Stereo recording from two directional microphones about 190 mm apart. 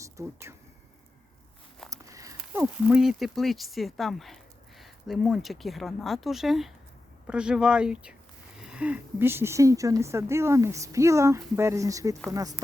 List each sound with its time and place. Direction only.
0.0 s speech: 15° right (ahead or behind)
1.9 s a sound: 15° right (ahead or behind)
2.4 s speech: 10° right (ahead or behind)